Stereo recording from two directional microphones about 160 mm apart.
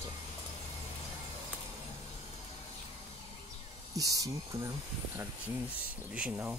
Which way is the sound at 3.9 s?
20° right (ahead or behind).